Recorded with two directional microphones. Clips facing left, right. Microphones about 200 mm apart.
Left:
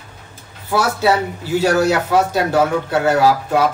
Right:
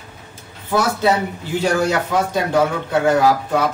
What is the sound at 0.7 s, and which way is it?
Speech, 10° left (ahead or behind).